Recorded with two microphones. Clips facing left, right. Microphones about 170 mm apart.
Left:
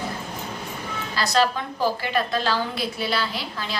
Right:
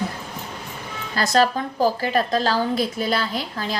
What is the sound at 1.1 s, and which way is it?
A woman's voice, 45° right (ahead or behind).